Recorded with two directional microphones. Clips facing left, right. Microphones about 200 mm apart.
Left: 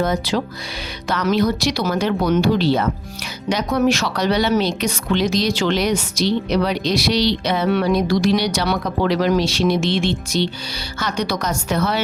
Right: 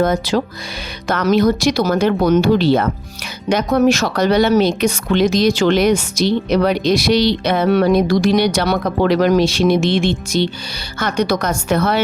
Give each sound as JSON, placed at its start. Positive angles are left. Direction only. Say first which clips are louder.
{"t": 0.0, "sound": "a woman's voice", "louder": "right 4 dB", "side_deg": -50}